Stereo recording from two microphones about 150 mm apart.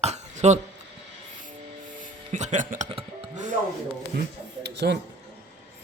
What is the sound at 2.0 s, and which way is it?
Music, 55° right (ahead or behind).